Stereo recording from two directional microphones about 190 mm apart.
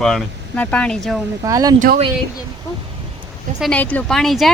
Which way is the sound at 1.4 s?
20° right (ahead or behind).